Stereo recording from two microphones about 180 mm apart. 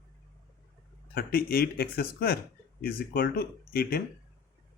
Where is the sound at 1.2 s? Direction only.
55° left (ahead or behind).